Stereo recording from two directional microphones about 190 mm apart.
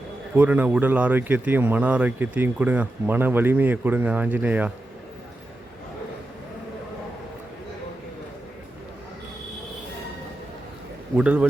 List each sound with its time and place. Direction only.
0.3 s speech: 10° right (ahead or behind)
11.2 s speech: 5° right (ahead or behind)